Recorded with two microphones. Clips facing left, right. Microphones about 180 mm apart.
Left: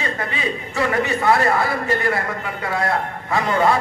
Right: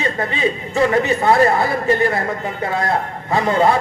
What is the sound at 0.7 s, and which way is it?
A man's voice, 20° right (ahead or behind).